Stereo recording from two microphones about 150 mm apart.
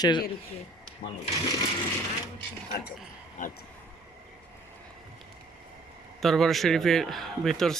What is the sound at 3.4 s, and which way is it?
Speech, 55° left (ahead or behind).